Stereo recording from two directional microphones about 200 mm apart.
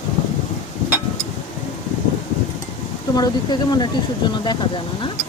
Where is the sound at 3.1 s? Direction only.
20° left (ahead or behind).